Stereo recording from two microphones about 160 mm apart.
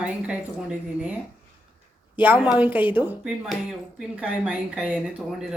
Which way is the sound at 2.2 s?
10° right (ahead or behind).